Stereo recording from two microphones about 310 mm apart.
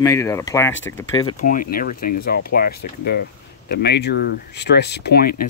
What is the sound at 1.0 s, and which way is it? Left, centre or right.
Speech, left.